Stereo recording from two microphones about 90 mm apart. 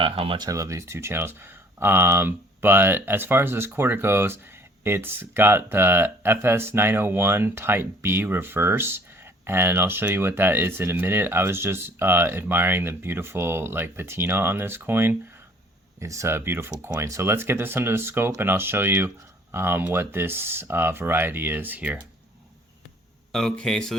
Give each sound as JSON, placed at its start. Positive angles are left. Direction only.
{"t": 0.0, "sound": "speech", "side_deg": -90}
{"t": 0.5, "sound": "speech", "side_deg": -35}
{"t": 16.0, "sound": "speech", "side_deg": -35}
{"t": 23.3, "sound": "speech", "side_deg": 10}